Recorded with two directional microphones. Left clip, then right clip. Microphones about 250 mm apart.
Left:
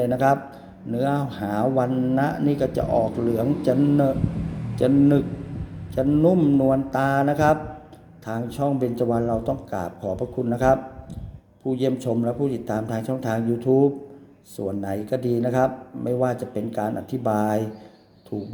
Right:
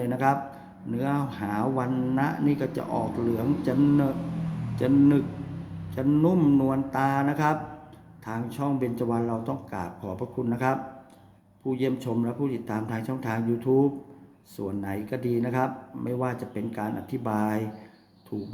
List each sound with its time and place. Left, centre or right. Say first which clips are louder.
0.0 s speech: left 5 dB; centre